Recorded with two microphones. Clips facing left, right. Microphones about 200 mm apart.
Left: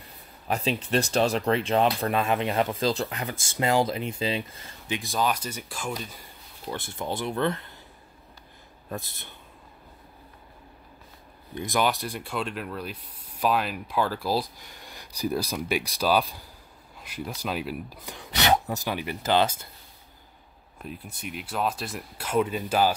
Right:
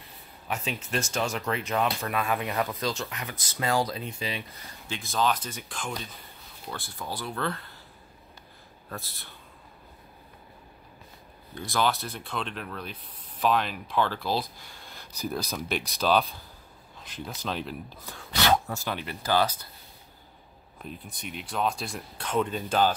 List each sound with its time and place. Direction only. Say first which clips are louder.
0.5 s speech: left 6 dB; 35° left (ahead or behind)
4.6 s speech: left 5 dB; 15° left (ahead or behind)
6.7 s speech: left 5 dB; 20° left (ahead or behind)
8.8 s speech: left 5 dB; 20° left (ahead or behind)
11.5 s speech: left 2 dB; 15° left (ahead or behind)
19.2 s speech: left 2 dB; 25° left (ahead or behind)
20.8 s speech: left 2 dB; 5° left (ahead or behind)